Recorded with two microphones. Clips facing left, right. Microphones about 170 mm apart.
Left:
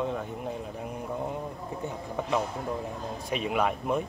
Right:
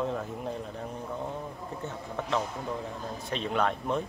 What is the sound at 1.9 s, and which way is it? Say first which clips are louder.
Speech: left 2 dB; 10° left (ahead or behind).